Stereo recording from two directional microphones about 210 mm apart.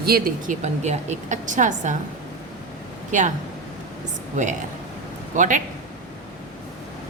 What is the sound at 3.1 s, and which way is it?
Speech, 35° right (ahead or behind).